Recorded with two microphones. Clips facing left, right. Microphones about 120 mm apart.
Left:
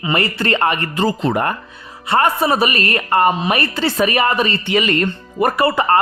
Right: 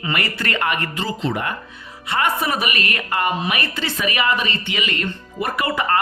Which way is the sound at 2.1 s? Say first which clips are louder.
Left 6 dB; 35° left (ahead or behind).